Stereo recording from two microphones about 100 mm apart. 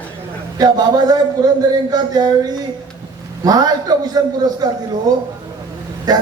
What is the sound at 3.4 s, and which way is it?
A man's voice, 40° right (ahead or behind).